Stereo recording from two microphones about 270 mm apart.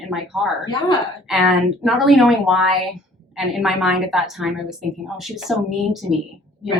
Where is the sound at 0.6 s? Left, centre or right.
Centre.